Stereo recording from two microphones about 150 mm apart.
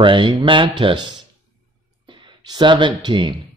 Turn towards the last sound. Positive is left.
turn(degrees=-30)  # may be behind; listen again after turning